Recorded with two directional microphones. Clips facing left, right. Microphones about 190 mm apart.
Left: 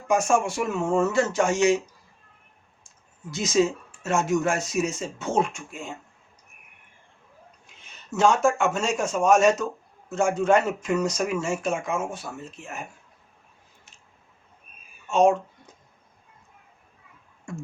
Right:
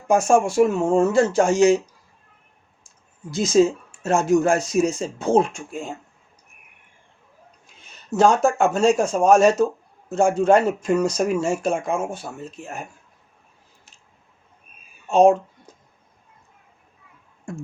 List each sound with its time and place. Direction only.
0.1 s speech: 35° right (ahead or behind)
3.6 s speech: 35° right (ahead or behind)
8.1 s speech: 35° right (ahead or behind)
15.1 s speech: 35° right (ahead or behind)